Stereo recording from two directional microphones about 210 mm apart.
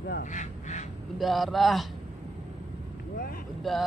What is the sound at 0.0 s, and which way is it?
Speech, 45° left (ahead or behind).